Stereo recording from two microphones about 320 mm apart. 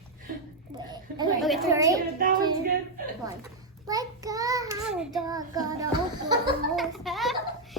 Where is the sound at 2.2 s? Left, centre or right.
Right.